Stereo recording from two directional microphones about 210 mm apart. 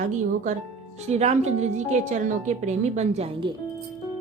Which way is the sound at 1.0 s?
30° right (ahead or behind).